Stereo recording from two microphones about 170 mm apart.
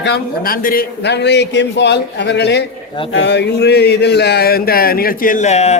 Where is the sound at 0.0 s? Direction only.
75° left (ahead or behind).